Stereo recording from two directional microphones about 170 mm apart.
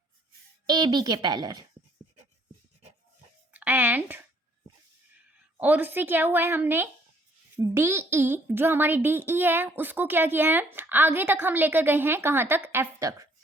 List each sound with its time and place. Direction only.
0.7 s a woman's voice: 25° right (ahead or behind)
3.5 s a sound: 10° right (ahead or behind)
5.5 s speech: 10° right (ahead or behind)